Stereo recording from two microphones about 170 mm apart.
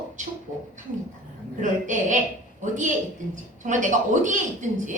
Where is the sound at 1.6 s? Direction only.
50° right (ahead or behind).